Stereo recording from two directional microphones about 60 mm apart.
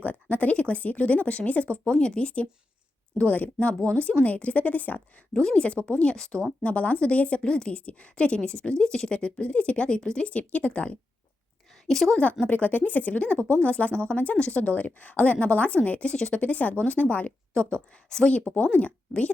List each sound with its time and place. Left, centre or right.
0.0 s speech: left
5.3 s a woman's voice: centre
12.0 s a woman's voice: centre
12.5 s speech: left
17.5 s speech: centre